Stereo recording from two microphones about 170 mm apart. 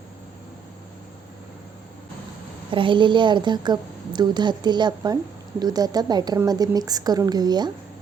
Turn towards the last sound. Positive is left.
turn(degrees=-25)  # may be behind; listen again after turning